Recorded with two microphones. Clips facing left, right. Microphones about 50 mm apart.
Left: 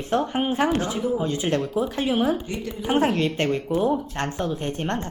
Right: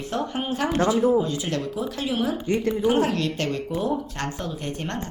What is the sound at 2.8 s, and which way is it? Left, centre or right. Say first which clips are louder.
Speech: left 5 dB; left.